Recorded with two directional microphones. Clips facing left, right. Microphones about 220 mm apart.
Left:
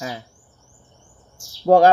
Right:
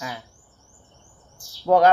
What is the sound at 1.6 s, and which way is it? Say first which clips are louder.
Speech: left 4 dB; 25° left (ahead or behind).